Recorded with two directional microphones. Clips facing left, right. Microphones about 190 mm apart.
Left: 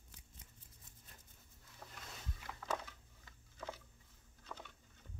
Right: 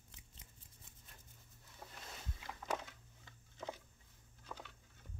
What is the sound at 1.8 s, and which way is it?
Boat, 20° right (ahead or behind).